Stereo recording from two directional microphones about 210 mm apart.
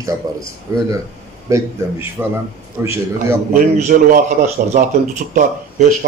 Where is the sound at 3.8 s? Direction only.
40° right (ahead or behind).